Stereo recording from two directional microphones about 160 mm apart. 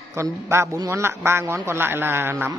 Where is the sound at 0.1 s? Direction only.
15° right (ahead or behind).